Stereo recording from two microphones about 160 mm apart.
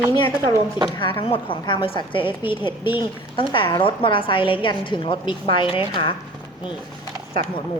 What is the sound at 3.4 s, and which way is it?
A woman's voice, 30° left (ahead or behind).